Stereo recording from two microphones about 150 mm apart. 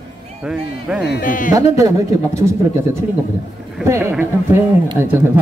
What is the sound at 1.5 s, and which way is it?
Speech, 20° right (ahead or behind).